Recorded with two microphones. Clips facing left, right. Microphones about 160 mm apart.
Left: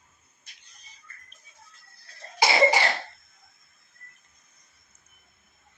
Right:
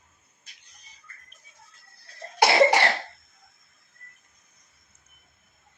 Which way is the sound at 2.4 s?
65° right (ahead or behind).